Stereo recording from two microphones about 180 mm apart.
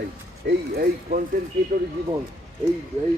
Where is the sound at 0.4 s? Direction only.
60° right (ahead or behind).